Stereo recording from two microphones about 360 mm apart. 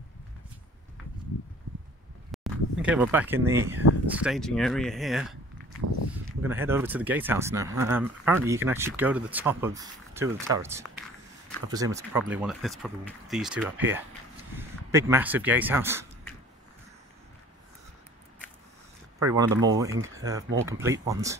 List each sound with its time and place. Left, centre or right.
2.3 s speech: centre
19.2 s speech: centre
19.9 s speech: right
20.5 s speech: centre